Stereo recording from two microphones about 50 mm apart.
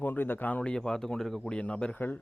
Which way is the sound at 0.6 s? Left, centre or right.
Centre.